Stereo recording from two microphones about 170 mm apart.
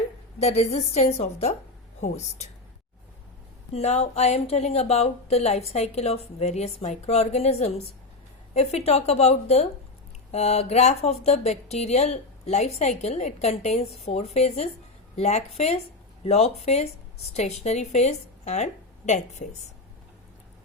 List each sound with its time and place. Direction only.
0.3 s speech: 40° left (ahead or behind)
3.7 s speech: 40° left (ahead or behind)